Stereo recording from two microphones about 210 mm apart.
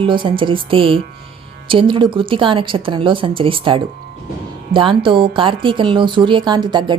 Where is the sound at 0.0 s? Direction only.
25° right (ahead or behind).